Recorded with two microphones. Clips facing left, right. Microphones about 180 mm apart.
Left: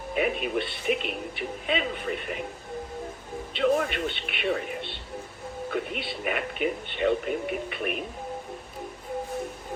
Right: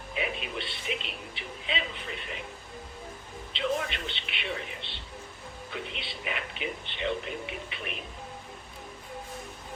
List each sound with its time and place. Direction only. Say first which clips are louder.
0.1 s a man's voice: left 8 dB; 50° left (ahead or behind)
3.5 s a man's voice: left 7 dB; 50° left (ahead or behind)